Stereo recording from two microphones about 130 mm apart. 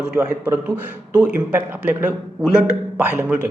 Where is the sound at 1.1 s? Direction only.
10° right (ahead or behind).